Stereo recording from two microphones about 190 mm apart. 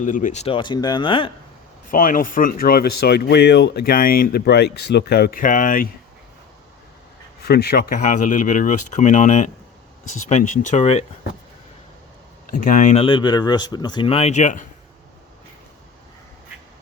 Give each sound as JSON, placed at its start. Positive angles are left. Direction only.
{"t": 0.0, "sound": "speech", "side_deg": 45}
{"t": 1.9, "sound": "speech", "side_deg": 45}
{"t": 7.4, "sound": "speech", "side_deg": 60}
{"t": 12.5, "sound": "speech", "side_deg": 40}